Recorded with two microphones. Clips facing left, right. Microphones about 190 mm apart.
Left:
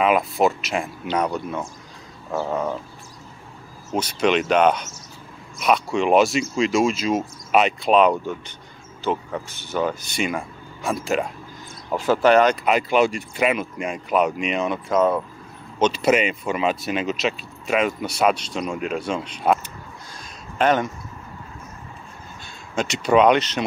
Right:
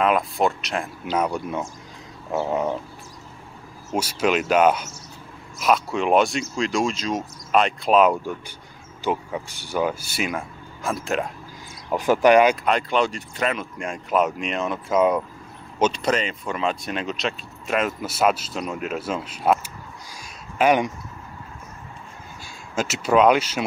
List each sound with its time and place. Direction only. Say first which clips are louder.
0.0 s speech: left 2 dB; 5° left (ahead or behind); by 2.8 s 15° right (ahead or behind)
3.9 s speech: left 2 dB; 10° right (ahead or behind)
11.9 s speech: right 1 dB; 15° right (ahead or behind)
12.5 s speech: left 3 dB; 5° left (ahead or behind)
15.9 s speech: left 4 dB; 10° left (ahead or behind)
20.1 s a sound: left 1 dB; 10° right (ahead or behind)
22.4 s speech: left 1 dB; 5° right (ahead or behind)